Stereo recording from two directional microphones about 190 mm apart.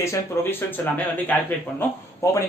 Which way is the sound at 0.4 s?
15° left (ahead or behind).